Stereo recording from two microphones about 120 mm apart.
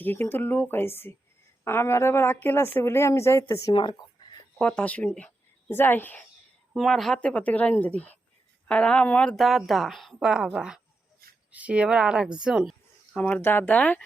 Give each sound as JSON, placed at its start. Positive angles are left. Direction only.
{"t": 0.0, "sound": "a woman's voice", "side_deg": 20}
{"t": 3.7, "sound": "speech", "side_deg": 40}
{"t": 4.6, "sound": "speech", "side_deg": 10}
{"t": 6.7, "sound": "a woman's voice", "side_deg": 0}
{"t": 13.1, "sound": "speech", "side_deg": 15}